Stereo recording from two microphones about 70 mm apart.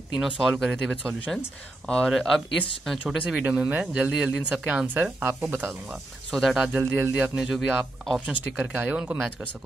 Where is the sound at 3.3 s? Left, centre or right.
Centre.